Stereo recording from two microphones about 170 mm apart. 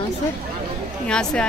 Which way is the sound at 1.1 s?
5° left (ahead or behind).